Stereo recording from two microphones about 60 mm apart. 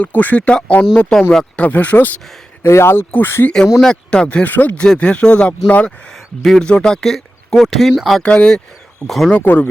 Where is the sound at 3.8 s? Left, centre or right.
Centre.